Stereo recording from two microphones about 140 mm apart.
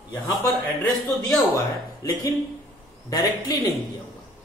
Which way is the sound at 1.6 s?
25° left (ahead or behind).